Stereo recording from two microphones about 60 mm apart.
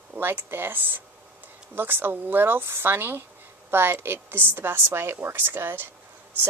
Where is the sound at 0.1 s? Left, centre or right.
Right.